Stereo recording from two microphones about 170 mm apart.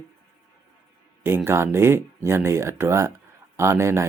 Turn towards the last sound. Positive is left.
turn(degrees=-15)  # may be behind; listen again after turning